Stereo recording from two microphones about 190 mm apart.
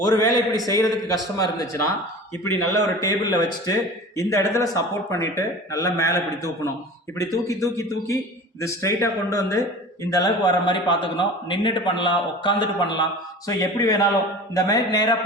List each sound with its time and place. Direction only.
0.0 s a man's voice: 20° left (ahead or behind)